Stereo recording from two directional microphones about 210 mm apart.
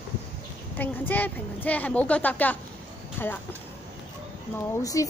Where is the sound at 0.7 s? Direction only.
10° left (ahead or behind).